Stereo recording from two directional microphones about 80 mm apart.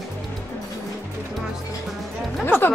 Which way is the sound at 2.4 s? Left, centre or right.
Left.